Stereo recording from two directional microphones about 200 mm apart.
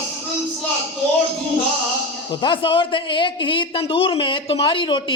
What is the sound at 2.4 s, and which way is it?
A man's voice, 25° left (ahead or behind).